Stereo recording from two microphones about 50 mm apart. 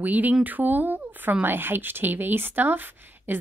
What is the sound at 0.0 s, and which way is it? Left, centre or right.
A woman's voice, right.